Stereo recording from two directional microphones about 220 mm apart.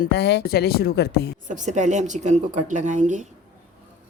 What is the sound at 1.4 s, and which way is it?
Speech, 35° right (ahead or behind).